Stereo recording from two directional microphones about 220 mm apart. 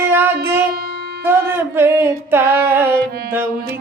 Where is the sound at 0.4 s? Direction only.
10° right (ahead or behind).